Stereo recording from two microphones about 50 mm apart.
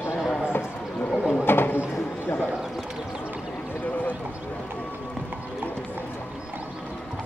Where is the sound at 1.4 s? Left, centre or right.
Left.